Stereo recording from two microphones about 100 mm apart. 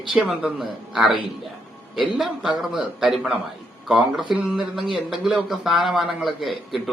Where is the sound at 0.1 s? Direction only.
5° right (ahead or behind).